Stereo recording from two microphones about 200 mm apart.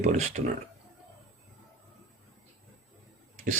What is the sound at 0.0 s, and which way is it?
Speech, 35° right (ahead or behind).